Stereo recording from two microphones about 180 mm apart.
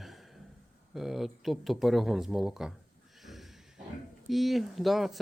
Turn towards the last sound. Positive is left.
turn(degrees=0)  # may be behind; listen again after turning